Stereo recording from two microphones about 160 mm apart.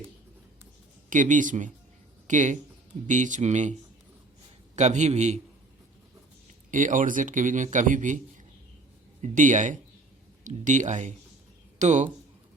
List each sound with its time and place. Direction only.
1.1 s speech: 55° right (ahead or behind)
6.7 s speech: 55° right (ahead or behind)
9.2 s speech: 50° right (ahead or behind)